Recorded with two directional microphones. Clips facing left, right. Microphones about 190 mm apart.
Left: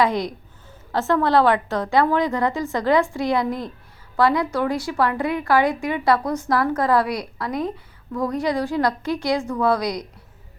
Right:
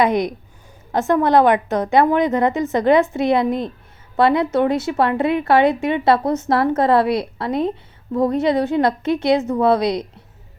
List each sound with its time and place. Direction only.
0.0 s a woman's voice: 20° right (ahead or behind)